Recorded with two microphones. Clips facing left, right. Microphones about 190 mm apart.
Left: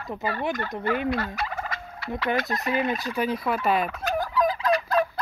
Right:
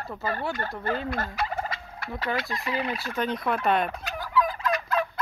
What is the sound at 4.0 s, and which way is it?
Fowl, 45° left (ahead or behind).